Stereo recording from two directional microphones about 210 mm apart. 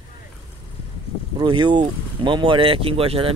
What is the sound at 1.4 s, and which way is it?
Speech, 20° right (ahead or behind).